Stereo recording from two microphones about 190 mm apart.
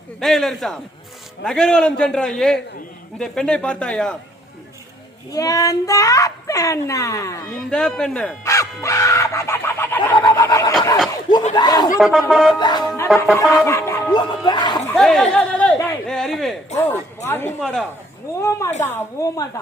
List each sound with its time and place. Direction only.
0.2 s a man's voice: centre (ahead or behind)
5.3 s speech: 20° left (ahead or behind)
7.5 s speech: 5° left (ahead or behind)
10.3 s a sound: 15° left (ahead or behind)
11.1 s snicker: 20° left (ahead or behind)
11.5 s speech: 20° left (ahead or behind)
11.9 s a man's voice: centre (ahead or behind)
12.5 s speech: 25° left (ahead or behind)
14.9 s a man's voice: centre (ahead or behind)
17.2 s a man's voice: 15° left (ahead or behind)
18.3 s speech: 15° left (ahead or behind)